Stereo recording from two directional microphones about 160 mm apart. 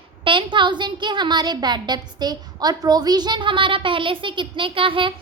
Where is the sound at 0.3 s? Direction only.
30° right (ahead or behind).